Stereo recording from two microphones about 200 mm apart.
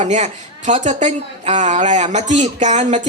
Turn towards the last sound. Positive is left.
turn(degrees=-35)  # may be behind; listen again after turning